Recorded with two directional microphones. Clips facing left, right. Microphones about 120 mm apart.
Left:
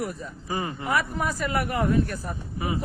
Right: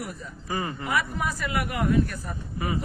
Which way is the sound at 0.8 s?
40° left (ahead or behind).